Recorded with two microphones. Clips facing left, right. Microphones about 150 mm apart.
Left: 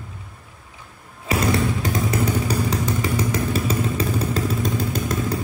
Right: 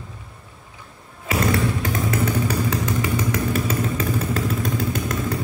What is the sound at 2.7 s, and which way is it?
Motorcycle, 30° left (ahead or behind).